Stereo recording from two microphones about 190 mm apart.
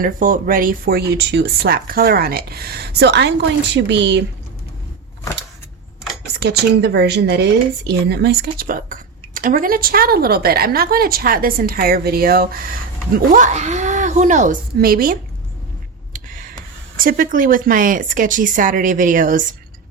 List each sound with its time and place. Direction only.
0.0 s speech: 45° right (ahead or behind); by 4.2 s 70° right (ahead or behind)
6.4 s speech: 60° right (ahead or behind)
16.1 s a sound: 45° right (ahead or behind)
17.0 s speech: 50° right (ahead or behind)